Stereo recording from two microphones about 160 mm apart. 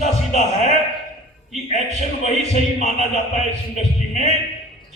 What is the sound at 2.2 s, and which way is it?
Speech, 45° left (ahead or behind).